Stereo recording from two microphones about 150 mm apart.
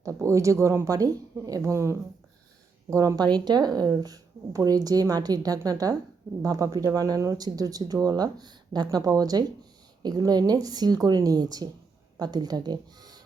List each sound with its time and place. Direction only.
0.0 s speech: 20° right (ahead or behind)